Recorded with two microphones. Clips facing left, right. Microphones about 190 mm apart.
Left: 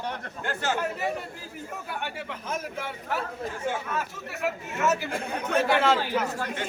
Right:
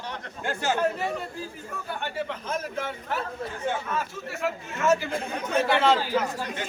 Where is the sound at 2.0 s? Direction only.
10° left (ahead or behind).